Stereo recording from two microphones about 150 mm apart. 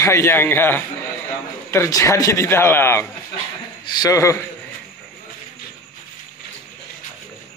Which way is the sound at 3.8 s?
30° left (ahead or behind).